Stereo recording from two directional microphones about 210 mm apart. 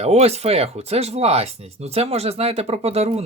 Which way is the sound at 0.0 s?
30° right (ahead or behind).